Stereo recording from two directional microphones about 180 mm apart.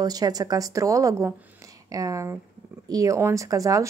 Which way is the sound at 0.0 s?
20° right (ahead or behind).